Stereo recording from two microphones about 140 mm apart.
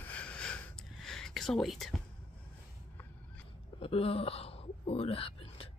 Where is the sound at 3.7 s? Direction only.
45° left (ahead or behind).